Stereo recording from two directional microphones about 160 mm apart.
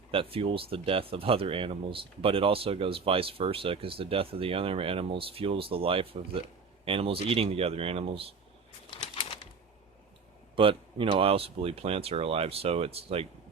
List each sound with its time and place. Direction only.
0.1 s speech: 35° right (ahead or behind)
10.5 s speech: 35° right (ahead or behind)